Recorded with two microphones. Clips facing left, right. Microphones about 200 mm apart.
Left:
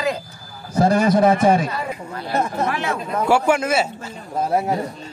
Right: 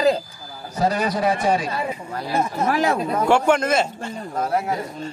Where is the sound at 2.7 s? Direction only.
40° right (ahead or behind).